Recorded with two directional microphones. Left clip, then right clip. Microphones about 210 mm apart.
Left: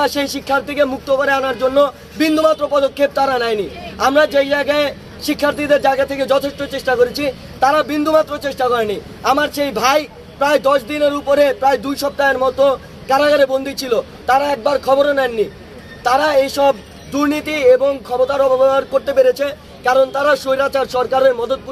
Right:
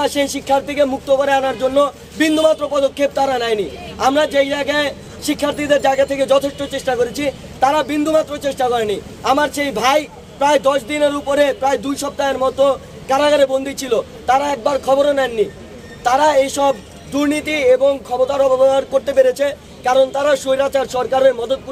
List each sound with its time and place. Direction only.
0.0 s speech: centre (ahead or behind)